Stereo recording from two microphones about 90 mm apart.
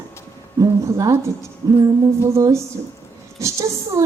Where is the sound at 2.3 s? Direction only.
35° right (ahead or behind).